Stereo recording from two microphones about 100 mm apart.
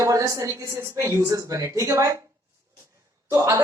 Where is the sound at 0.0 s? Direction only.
35° right (ahead or behind).